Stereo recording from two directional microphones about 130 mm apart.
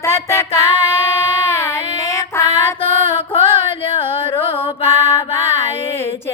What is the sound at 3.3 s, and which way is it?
Carnatic music, 45° left (ahead or behind).